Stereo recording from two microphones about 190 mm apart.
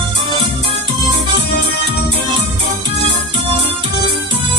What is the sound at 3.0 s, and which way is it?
Music, 25° right (ahead or behind).